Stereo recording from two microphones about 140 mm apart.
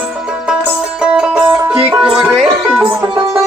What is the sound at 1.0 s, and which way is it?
Music, 5° right (ahead or behind).